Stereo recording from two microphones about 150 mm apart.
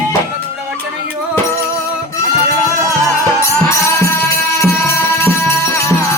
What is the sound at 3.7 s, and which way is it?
Music, 15° left (ahead or behind).